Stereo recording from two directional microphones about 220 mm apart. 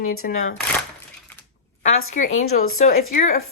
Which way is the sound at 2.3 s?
70° left (ahead or behind).